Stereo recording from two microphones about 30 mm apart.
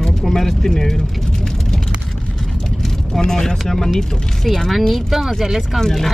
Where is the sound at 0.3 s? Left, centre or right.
Centre.